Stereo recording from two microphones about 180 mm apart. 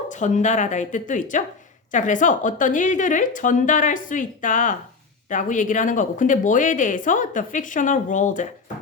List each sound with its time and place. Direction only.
0.1 s a woman's voice: 40° left (ahead or behind)